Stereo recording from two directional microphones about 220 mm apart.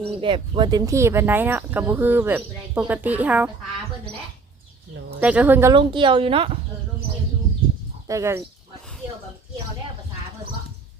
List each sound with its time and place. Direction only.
0.0 s speech: 25° right (ahead or behind); by 3.5 s 5° right (ahead or behind)
5.2 s speech: 5° right (ahead or behind)
5.7 s speech: 20° right (ahead or behind)
8.0 s speech: 15° right (ahead or behind)